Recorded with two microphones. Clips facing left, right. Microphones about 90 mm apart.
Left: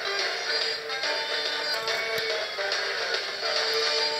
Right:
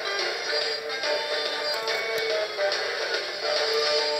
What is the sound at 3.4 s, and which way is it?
Music, 20° right (ahead or behind).